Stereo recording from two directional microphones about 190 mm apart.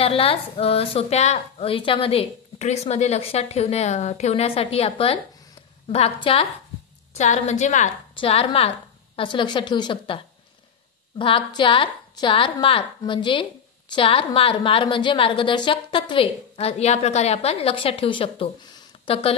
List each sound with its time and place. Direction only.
0.0 s a woman's voice: 30° left (ahead or behind)